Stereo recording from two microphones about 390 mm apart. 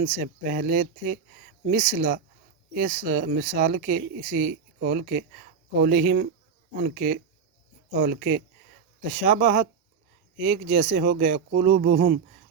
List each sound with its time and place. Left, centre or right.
0.2 s speech: right